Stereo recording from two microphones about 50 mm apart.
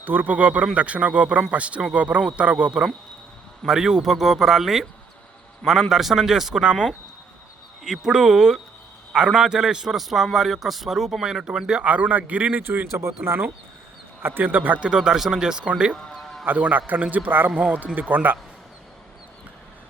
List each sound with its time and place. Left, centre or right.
0.0 s a man's voice: right; by 4.9 s centre
5.9 s a man's voice: centre
7.9 s a man's voice: centre
11.9 s speech: right
12.6 s speech: right
12.9 s speech: right
14.2 s a man's voice: right
14.8 s a man's voice: centre
16.1 s music: centre
16.5 s a man's voice: right
17.6 s speech: right
18.1 s a man's voice: right